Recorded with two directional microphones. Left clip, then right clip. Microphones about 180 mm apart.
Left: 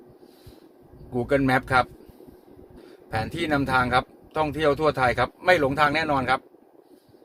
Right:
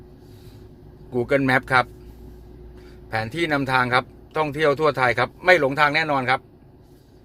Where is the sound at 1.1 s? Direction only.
15° right (ahead or behind).